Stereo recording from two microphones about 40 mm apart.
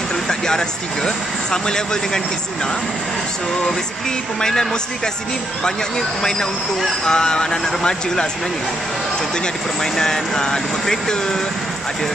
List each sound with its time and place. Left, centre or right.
0.1 s speech: centre
4.4 s speech: centre
9.8 s speech: centre